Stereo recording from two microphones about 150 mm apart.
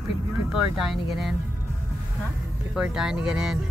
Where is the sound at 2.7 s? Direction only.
5° right (ahead or behind).